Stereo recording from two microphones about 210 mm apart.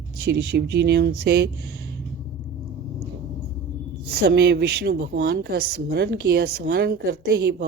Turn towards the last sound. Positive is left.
turn(degrees=-50)  # may be behind; listen again after turning